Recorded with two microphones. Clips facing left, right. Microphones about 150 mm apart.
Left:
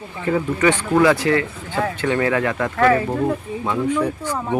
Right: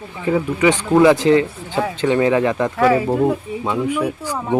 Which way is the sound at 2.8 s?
10° right (ahead or behind).